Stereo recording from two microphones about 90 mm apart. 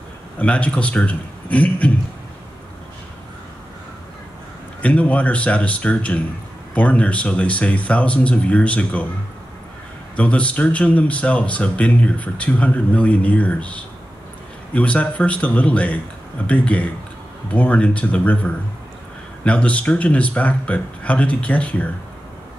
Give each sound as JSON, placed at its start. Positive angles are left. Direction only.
{"t": 0.4, "sound": "speech", "side_deg": 15}
{"t": 4.8, "sound": "speech", "side_deg": 15}
{"t": 10.1, "sound": "speech", "side_deg": 15}